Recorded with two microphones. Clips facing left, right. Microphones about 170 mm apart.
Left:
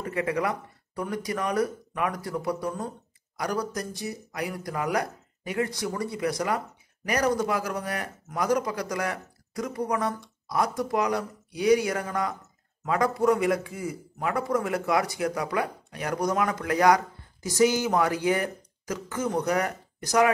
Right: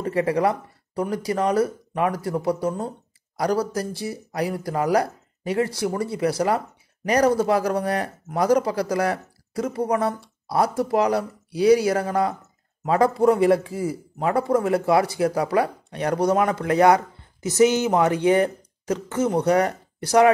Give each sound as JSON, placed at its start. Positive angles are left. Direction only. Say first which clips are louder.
{"t": 0.0, "sound": "a man's voice", "louder": "right 6 dB", "side_deg": -30}